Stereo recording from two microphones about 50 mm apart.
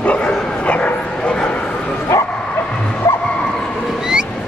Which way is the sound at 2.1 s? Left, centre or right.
Left.